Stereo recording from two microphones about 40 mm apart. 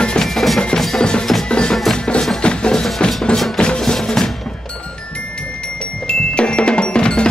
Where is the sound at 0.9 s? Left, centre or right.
Centre.